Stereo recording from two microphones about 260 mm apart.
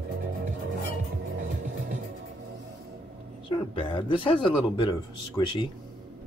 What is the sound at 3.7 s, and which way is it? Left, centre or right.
Speech, centre.